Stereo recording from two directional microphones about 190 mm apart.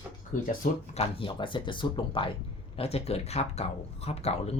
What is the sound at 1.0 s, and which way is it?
Speech, 30° left (ahead or behind).